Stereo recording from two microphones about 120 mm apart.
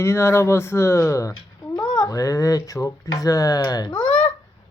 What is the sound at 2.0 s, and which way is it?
Speech, 25° left (ahead or behind).